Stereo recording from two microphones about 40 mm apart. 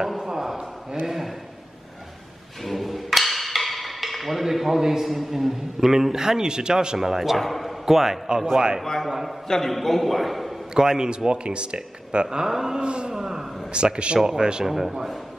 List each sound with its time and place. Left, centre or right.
0.0 s a sound: centre
1.0 s a man's voice: centre
2.6 s speech: centre
7.0 s a man's voice: centre
7.3 s a man's voice: centre
8.8 s a man's voice: centre
10.7 s speech: centre
12.4 s a man's voice: centre
12.8 s speech: right
13.1 s a man's voice: centre
13.7 s a man's voice: right; by 15.1 s centre